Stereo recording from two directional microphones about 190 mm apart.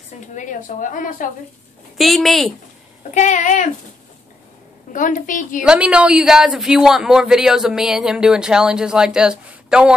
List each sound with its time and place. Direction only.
0.3 s a woman's voice: 40° left (ahead or behind)
2.0 s speech: centre (ahead or behind)
3.0 s speech: 40° left (ahead or behind)
4.9 s a woman's voice: 45° left (ahead or behind)
5.6 s speech: 5° right (ahead or behind)